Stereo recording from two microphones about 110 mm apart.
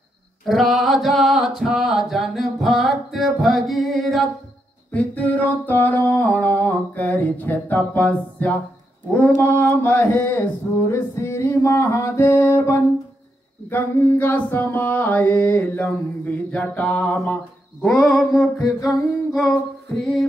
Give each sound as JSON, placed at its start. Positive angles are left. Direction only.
{"t": 0.5, "sound": "a sound", "side_deg": 0}
{"t": 4.9, "sound": "a sound", "side_deg": 15}
{"t": 9.1, "sound": "mantra", "side_deg": 15}
{"t": 10.9, "sound": "music", "side_deg": 25}
{"t": 13.7, "sound": "mantra", "side_deg": 20}
{"t": 18.6, "sound": "humming", "side_deg": 35}